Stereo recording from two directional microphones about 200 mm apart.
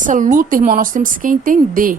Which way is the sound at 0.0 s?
40° right (ahead or behind).